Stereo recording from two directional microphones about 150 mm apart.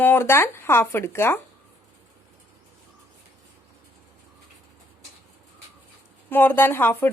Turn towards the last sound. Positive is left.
turn(degrees=15)  # may be behind; listen again after turning